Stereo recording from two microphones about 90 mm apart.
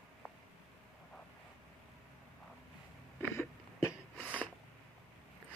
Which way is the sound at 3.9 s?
15° right (ahead or behind).